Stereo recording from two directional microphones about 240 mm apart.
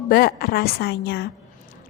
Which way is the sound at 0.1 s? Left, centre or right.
Left.